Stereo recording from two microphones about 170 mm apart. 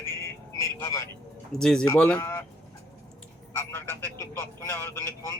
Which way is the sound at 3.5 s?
15° left (ahead or behind).